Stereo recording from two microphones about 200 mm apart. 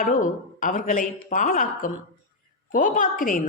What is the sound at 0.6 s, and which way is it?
A woman's voice, 40° left (ahead or behind).